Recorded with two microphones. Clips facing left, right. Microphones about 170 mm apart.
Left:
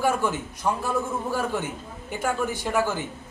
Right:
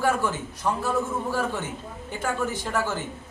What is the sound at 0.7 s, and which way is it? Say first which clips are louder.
Speech: even; 15° left (ahead or behind).